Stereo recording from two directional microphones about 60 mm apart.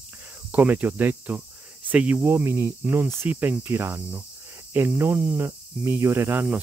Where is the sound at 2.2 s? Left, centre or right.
Right.